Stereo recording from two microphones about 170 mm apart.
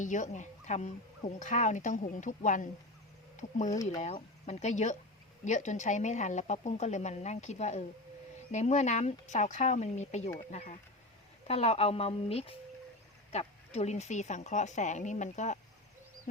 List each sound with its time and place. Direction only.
0.0 s speech: 45° left (ahead or behind)